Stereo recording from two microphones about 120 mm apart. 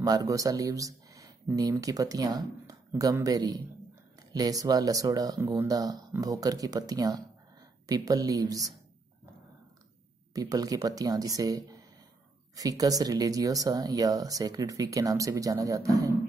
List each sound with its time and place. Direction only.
0.0 s speech: 30° right (ahead or behind)
10.3 s speech: 30° right (ahead or behind)